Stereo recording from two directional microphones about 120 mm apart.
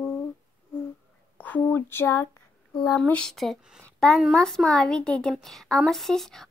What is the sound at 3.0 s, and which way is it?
A woman's voice, 10° left (ahead or behind).